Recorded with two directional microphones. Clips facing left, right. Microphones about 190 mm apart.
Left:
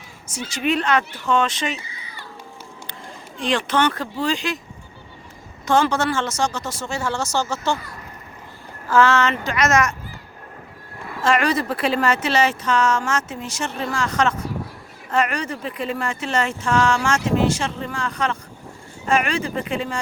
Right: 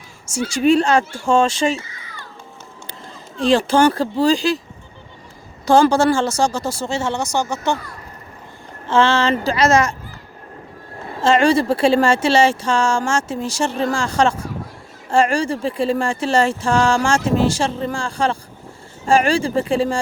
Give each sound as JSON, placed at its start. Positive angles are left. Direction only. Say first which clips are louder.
{"t": 0.5, "sound": "speech", "louder": "right 6 dB", "side_deg": -30}
{"t": 1.8, "sound": "a sound", "louder": "right 1 dB", "side_deg": 15}
{"t": 3.5, "sound": "speech", "louder": "right 6 dB", "side_deg": -30}
{"t": 5.6, "sound": "speech", "louder": "right 6 dB", "side_deg": -35}
{"t": 8.9, "sound": "speech", "louder": "right 1 dB", "side_deg": -30}
{"t": 11.0, "sound": "speech", "louder": "right 5 dB", "side_deg": -30}